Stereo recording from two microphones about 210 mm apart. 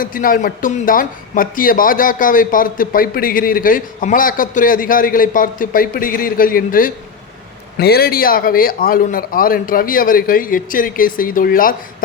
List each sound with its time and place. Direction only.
0.0 s a man's voice: 40° left (ahead or behind)